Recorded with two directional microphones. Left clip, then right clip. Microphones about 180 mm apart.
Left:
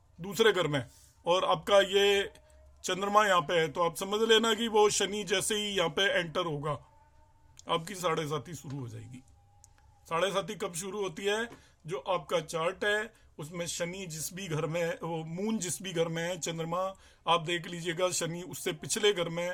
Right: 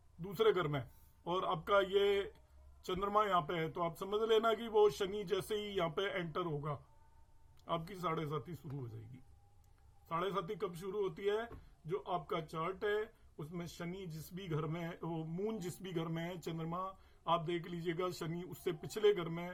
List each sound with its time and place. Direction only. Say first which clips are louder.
0.2 s speech: left 7 dB; 30° left (ahead or behind)
10.1 s speech: left 8 dB; 30° left (ahead or behind)